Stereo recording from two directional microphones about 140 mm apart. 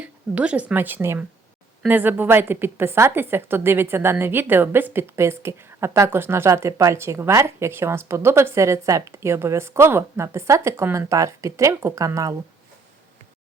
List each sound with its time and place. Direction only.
0.0 s a woman's voice: 10° right (ahead or behind)